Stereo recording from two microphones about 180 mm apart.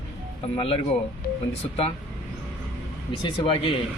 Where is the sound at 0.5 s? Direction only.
30° left (ahead or behind).